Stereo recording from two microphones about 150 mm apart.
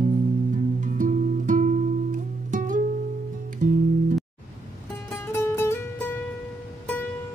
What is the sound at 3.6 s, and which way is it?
Music, 75° right (ahead or behind).